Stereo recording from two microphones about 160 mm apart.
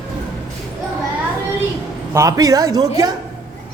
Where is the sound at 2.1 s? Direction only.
20° right (ahead or behind).